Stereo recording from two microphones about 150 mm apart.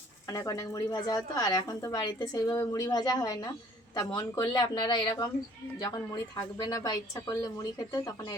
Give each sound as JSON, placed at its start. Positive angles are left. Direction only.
{"t": 0.3, "sound": "a woman's voice", "side_deg": 25}